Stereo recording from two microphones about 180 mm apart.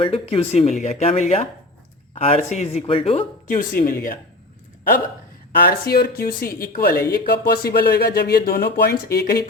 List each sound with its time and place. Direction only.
0.0 s speech: 35° left (ahead or behind)
3.5 s speech: 50° left (ahead or behind)
5.5 s speech: 60° left (ahead or behind)